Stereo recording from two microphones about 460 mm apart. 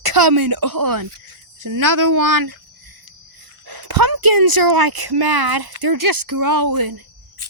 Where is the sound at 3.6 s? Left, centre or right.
Right.